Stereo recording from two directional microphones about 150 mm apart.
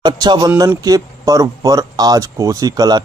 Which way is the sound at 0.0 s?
25° right (ahead or behind).